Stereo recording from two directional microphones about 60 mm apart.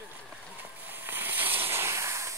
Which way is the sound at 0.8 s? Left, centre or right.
Right.